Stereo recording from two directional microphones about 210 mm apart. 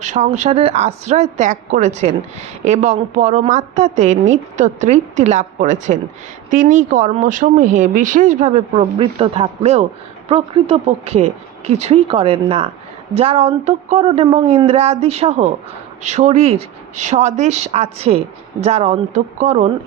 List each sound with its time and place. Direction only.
0.0 s a woman's voice: 35° right (ahead or behind)